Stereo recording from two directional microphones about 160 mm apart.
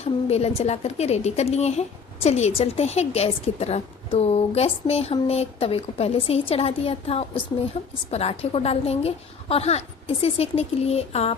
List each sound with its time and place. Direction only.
0.0 s a woman's voice: 40° left (ahead or behind)